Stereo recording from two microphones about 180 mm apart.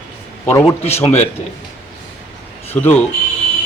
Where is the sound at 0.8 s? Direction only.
35° left (ahead or behind).